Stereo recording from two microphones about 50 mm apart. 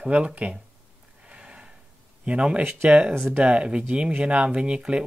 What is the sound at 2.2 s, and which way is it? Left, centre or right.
Speech, right.